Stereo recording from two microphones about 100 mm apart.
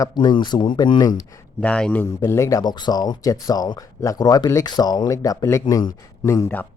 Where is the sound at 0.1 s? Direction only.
45° left (ahead or behind).